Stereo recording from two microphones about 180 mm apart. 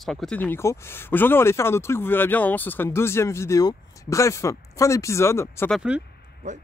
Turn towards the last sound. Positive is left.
turn(degrees=-5)  # may be behind; listen again after turning